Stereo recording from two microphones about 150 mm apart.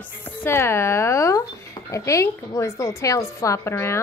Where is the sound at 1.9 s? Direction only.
20° left (ahead or behind).